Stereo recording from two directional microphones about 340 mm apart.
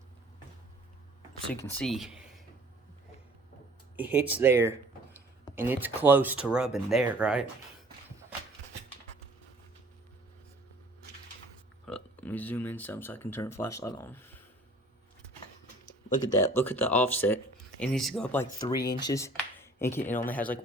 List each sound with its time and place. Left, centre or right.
1.3 s speech: centre
3.9 s speech: centre
11.9 s speech: centre
15.9 s speech: left
16.6 s speech: centre